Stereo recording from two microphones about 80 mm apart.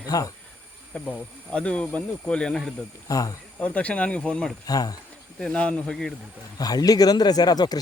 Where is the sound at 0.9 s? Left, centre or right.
Centre.